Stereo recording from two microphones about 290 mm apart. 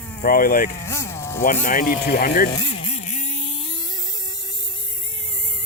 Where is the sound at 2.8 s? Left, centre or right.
Left.